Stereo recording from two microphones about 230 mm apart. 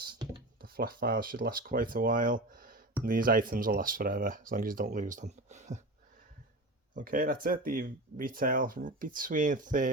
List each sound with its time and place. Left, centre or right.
0.6 s speech: right
6.9 s speech: right